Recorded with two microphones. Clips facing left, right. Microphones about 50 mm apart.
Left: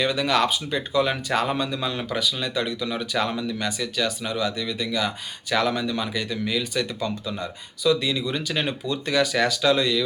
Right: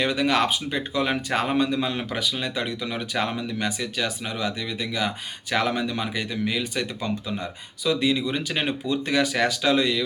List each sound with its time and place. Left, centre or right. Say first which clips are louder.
0.0 s speech: even; right